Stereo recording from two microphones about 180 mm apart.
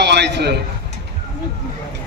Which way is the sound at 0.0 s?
70° right (ahead or behind).